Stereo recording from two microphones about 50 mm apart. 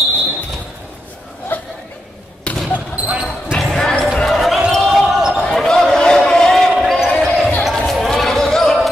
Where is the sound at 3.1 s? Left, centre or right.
Centre.